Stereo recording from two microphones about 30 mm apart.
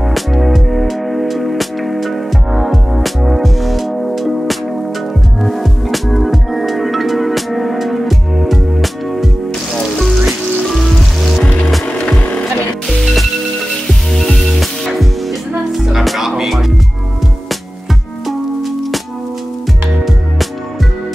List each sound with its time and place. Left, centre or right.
0.1 s music: centre
12.2 s music: left
12.9 s music: centre
18.2 s music: centre